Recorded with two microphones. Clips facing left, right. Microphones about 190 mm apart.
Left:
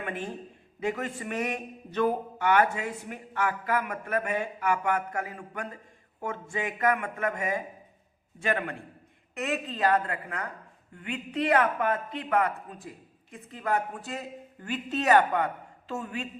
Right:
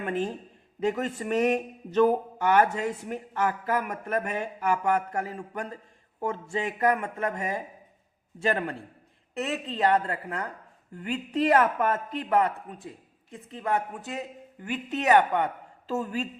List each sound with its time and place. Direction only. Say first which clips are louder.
0.0 s a sound: right 6 dB; 40° right (ahead or behind)
0.8 s a man's voice: right 3 dB; 40° right (ahead or behind); by 15.2 s 20° right (ahead or behind)
15.9 s speech: right 5 dB; 35° right (ahead or behind)